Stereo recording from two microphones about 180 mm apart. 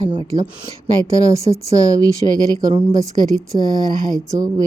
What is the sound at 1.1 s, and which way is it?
Speech, 15° right (ahead or behind).